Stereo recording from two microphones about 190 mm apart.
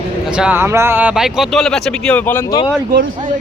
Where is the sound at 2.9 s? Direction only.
65° right (ahead or behind).